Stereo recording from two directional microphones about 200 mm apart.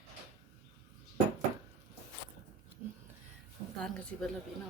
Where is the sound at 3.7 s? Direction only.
5° left (ahead or behind).